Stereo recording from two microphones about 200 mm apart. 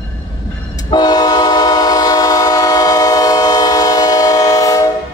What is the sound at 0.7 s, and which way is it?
Train, 20° left (ahead or behind).